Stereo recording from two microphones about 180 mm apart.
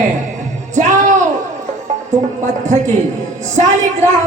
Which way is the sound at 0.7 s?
45° right (ahead or behind).